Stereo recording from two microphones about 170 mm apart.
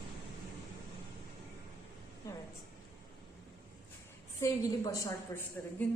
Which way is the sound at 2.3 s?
20° left (ahead or behind).